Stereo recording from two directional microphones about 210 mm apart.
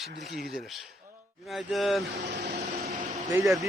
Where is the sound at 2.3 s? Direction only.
50° right (ahead or behind).